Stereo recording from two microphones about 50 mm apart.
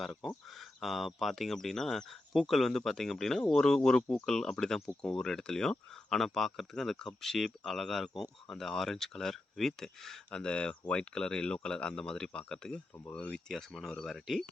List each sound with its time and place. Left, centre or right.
0.2 s speech: centre
10.3 s speech: centre
13.5 s speech: centre